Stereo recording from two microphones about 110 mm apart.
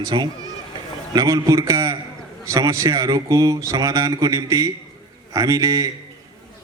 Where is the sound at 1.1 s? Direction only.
30° right (ahead or behind).